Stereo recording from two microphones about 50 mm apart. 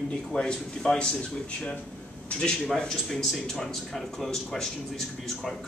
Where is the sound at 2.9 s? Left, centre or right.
Centre.